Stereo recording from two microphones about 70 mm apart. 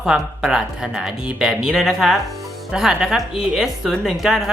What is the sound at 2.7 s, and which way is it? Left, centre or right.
A woman's voice, centre.